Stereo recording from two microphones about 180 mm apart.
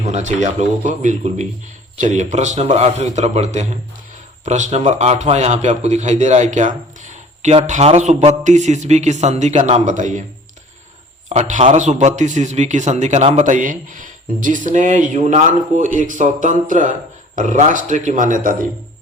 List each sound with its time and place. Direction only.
0.0 s a man's voice: 40° right (ahead or behind)
11.3 s a man's voice: 40° right (ahead or behind)